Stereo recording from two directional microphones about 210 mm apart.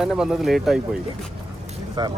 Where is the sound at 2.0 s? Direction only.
20° right (ahead or behind).